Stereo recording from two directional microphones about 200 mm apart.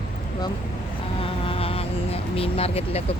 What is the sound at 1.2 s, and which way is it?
Vehicle, 30° left (ahead or behind).